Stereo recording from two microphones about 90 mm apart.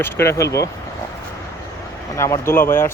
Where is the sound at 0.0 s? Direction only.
30° left (ahead or behind).